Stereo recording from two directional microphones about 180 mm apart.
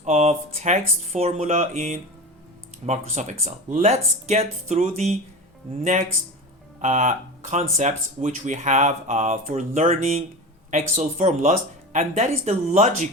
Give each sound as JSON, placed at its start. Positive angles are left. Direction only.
{"t": 0.0, "sound": "speech", "side_deg": -40}
{"t": 6.8, "sound": "speech", "side_deg": -40}